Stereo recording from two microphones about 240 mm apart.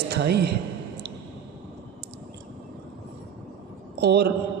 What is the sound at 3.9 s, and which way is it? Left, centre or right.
Speech, right.